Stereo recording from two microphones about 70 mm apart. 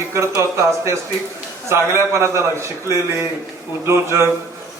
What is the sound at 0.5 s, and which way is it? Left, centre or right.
A man's voice, right.